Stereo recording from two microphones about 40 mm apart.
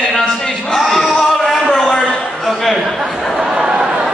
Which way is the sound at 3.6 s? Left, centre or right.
Right.